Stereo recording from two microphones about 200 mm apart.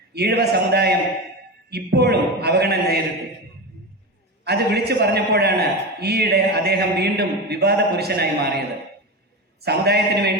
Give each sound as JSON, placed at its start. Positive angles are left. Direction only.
{"t": 0.1, "sound": "a man's voice", "side_deg": -55}
{"t": 4.4, "sound": "a man's voice", "side_deg": -55}
{"t": 9.6, "sound": "a man's voice", "side_deg": -55}